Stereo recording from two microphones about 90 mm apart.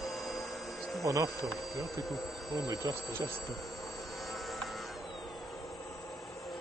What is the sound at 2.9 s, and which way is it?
Speech, 45° right (ahead or behind).